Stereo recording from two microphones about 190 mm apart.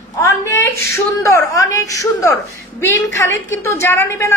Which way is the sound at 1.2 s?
15° left (ahead or behind).